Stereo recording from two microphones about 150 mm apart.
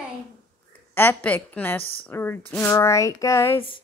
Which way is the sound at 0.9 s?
10° left (ahead or behind).